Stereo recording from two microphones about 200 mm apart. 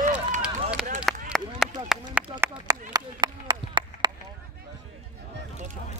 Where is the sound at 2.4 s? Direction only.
20° right (ahead or behind).